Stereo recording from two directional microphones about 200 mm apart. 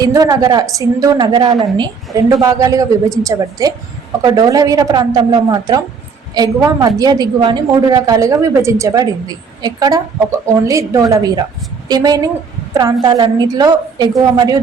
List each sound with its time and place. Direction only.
0.0 s a woman's voice: 20° right (ahead or behind)